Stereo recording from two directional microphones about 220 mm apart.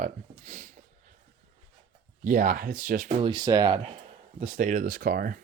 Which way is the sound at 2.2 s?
35° right (ahead or behind).